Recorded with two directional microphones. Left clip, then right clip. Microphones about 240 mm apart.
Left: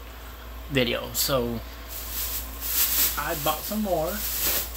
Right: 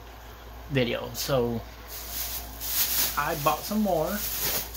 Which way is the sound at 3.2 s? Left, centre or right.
Right.